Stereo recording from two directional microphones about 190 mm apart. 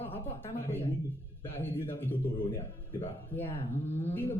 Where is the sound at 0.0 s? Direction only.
10° left (ahead or behind).